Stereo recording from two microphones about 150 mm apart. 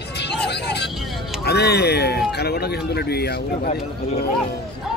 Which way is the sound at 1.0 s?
Centre (ahead or behind).